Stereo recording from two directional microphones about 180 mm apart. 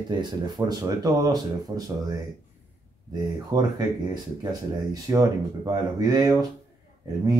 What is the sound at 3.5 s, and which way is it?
Speech, 20° right (ahead or behind).